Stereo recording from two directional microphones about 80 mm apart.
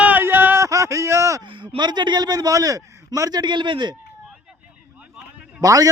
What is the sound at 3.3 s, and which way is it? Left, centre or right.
Speech, right.